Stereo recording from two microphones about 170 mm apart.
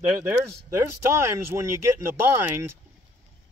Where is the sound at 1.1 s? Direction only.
15° right (ahead or behind).